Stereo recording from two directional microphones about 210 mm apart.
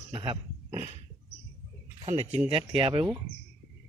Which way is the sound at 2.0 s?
30° right (ahead or behind).